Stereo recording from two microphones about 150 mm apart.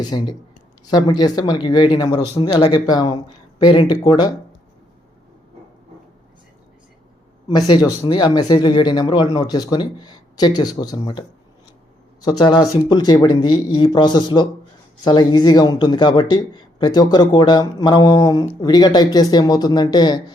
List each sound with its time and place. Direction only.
0.0 s speech: 25° left (ahead or behind)
7.4 s speech: 25° left (ahead or behind)